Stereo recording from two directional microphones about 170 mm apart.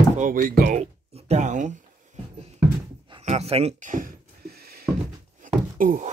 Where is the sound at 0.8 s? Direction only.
40° right (ahead or behind).